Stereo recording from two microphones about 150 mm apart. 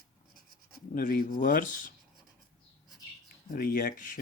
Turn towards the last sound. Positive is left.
turn(degrees=70)  # may be behind; listen again after turning